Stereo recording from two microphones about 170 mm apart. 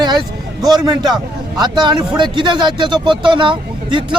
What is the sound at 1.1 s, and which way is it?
Speech, 25° right (ahead or behind).